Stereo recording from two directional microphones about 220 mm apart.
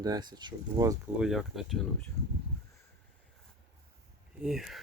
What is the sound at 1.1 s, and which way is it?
Speech, centre (ahead or behind).